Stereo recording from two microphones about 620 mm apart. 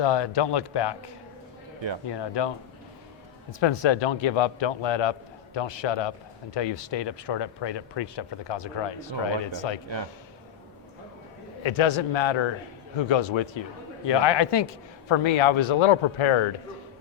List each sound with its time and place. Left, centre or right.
0.0 s speech: left
3.6 s a man's voice: left
11.6 s a man's voice: left